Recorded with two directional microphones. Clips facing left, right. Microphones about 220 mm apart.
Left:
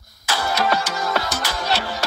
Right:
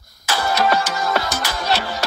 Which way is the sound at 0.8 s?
10° right (ahead or behind).